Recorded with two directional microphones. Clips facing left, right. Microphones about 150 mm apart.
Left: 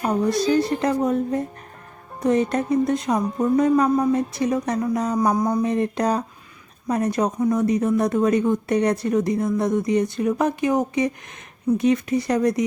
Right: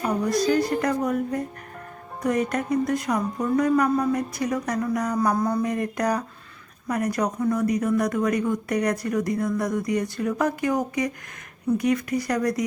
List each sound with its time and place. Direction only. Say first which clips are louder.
0.0 s speech: left 2 dB; 25° left (ahead or behind)